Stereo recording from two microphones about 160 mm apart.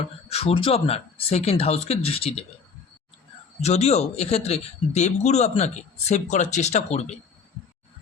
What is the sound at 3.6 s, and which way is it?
Speech, 40° left (ahead or behind).